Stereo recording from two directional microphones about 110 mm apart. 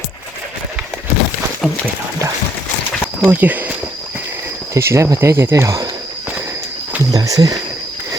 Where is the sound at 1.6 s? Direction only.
Centre (ahead or behind).